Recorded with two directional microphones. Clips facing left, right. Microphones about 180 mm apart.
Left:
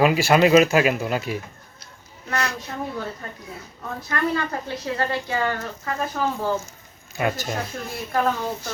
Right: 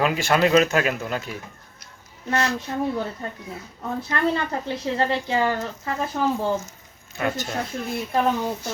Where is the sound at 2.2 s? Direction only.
25° right (ahead or behind).